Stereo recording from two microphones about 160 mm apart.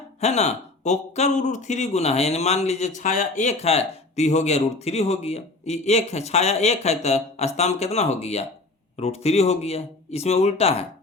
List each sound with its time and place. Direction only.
0.2 s speech: 45° left (ahead or behind)